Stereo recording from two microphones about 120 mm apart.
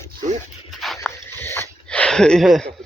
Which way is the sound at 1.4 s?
20° left (ahead or behind).